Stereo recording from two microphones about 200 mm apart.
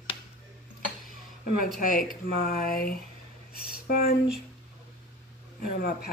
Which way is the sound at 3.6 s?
50° left (ahead or behind).